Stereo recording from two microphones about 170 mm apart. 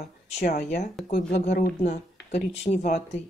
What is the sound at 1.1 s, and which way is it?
Speech, 70° left (ahead or behind).